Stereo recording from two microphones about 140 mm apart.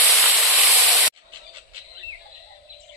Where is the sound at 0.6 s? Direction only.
Centre (ahead or behind).